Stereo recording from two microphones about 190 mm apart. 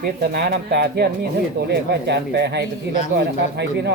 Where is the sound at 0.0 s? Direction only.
60° right (ahead or behind).